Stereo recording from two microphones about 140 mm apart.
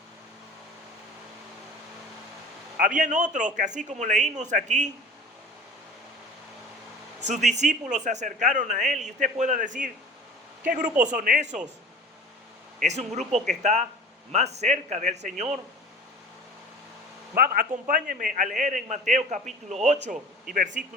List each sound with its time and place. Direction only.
3.0 s a man's voice: 60° right (ahead or behind)
7.3 s a man's voice: 60° right (ahead or behind)
12.8 s a man's voice: 55° right (ahead or behind)
17.3 s a man's voice: 90° right; by 20.1 s 55° right (ahead or behind)
20.5 s a man's voice: 80° right